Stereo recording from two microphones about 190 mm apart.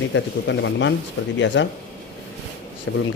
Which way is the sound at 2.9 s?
90° left.